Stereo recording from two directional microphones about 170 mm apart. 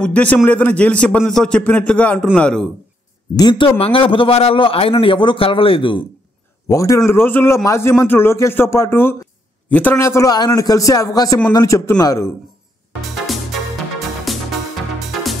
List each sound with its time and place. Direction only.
0.0 s a man's voice: 10° left (ahead or behind)
3.3 s a man's voice: 25° left (ahead or behind)
6.7 s a man's voice: 20° left (ahead or behind)
13.1 s music: centre (ahead or behind)